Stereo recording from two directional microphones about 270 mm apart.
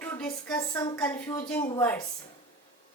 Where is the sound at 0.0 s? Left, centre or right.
Centre.